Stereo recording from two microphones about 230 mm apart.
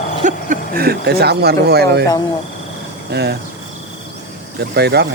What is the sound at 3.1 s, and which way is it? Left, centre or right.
Speech, right.